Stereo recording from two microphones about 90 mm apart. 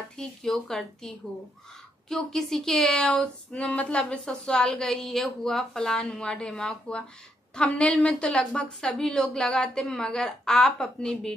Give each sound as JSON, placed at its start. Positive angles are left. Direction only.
{"t": 0.2, "sound": "a woman's voice", "side_deg": 5}